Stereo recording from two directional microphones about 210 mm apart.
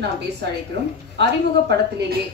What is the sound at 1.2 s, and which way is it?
Speech, 55° right (ahead or behind).